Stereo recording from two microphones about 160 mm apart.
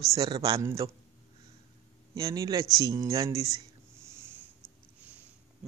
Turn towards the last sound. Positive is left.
turn(degrees=-15)  # may be behind; listen again after turning